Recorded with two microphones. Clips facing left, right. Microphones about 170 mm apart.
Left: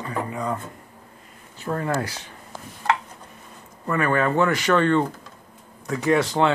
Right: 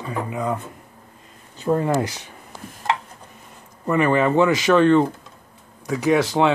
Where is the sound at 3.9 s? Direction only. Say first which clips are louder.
Right 4 dB; 15° right (ahead or behind).